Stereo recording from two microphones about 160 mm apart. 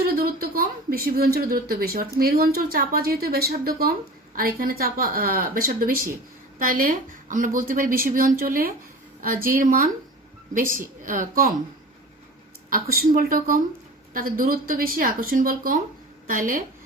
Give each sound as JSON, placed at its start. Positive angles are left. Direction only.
{"t": 0.0, "sound": "a woman's voice", "side_deg": -65}
{"t": 12.7, "sound": "a woman's voice", "side_deg": -65}